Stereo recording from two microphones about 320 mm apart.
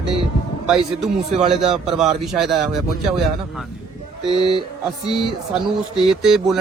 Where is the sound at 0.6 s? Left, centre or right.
Centre.